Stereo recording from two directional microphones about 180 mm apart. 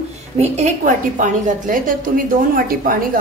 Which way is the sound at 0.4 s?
40° right (ahead or behind).